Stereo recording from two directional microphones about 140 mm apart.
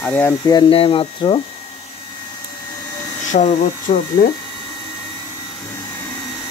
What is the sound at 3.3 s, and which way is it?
Speech, 60° left (ahead or behind).